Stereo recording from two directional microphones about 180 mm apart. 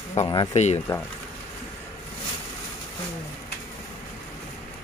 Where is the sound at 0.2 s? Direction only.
25° left (ahead or behind).